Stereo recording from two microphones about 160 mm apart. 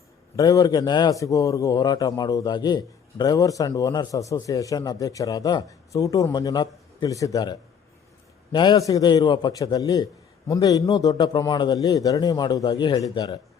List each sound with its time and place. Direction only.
0.3 s a man's voice: 20° left (ahead or behind)